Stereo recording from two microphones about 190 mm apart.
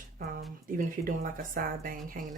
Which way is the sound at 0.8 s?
50° right (ahead or behind).